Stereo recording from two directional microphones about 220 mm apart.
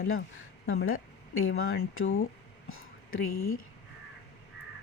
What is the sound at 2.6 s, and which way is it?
Whispering, 70° left (ahead or behind).